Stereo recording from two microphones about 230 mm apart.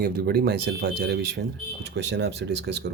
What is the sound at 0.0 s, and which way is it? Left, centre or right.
Speech, right.